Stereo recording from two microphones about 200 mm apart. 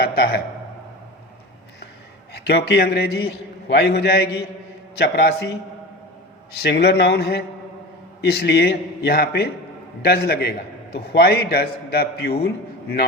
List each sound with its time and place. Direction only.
0.0 s a man's voice: 50° left (ahead or behind)
2.3 s a man's voice: 55° left (ahead or behind)